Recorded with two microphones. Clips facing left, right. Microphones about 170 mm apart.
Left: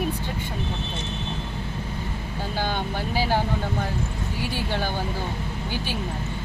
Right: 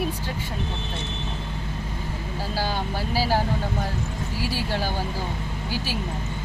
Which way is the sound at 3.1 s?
5° right (ahead or behind).